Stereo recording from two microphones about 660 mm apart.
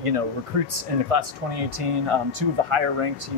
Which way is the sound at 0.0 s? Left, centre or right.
Right.